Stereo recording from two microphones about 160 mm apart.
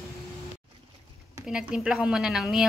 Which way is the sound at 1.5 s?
5° right (ahead or behind).